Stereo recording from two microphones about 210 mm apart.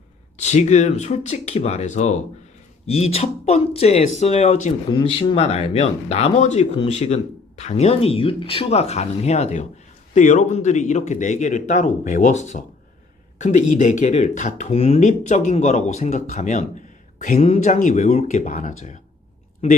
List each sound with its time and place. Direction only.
0.3 s speech: 35° left (ahead or behind)